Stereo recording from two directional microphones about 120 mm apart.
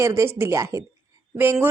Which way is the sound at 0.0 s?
25° right (ahead or behind).